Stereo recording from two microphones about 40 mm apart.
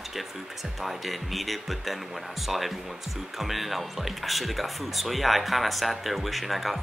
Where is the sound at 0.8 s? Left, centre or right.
Centre.